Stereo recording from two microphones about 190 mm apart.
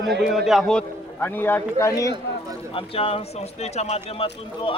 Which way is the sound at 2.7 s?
30° left (ahead or behind).